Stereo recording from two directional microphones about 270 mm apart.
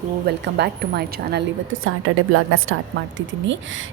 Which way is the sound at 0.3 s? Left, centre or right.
Right.